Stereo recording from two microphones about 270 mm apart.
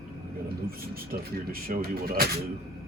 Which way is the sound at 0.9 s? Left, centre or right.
Right.